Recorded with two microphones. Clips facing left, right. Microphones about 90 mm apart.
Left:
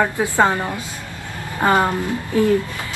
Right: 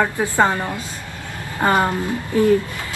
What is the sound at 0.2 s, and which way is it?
A woman's voice, 15° left (ahead or behind).